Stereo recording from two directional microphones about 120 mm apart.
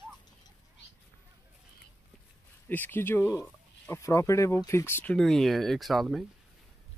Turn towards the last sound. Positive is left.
turn(degrees=0)  # may be behind; listen again after turning